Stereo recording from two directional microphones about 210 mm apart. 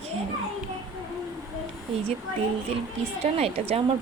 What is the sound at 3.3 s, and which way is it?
Speech, 30° right (ahead or behind).